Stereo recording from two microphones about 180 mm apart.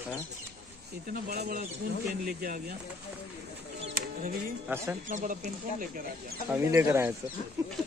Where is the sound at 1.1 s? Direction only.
55° right (ahead or behind).